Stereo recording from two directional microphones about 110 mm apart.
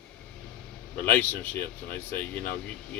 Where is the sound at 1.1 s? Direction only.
15° left (ahead or behind).